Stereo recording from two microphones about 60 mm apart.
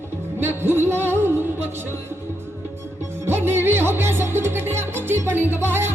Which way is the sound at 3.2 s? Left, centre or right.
Right.